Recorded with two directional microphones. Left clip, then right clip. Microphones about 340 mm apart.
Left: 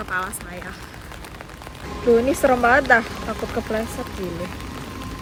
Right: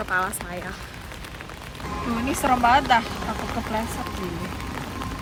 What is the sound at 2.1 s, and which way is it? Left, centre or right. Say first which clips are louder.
Speech: left 7 dB; centre.